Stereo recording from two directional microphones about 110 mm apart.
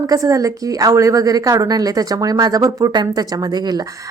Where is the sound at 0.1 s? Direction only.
30° right (ahead or behind).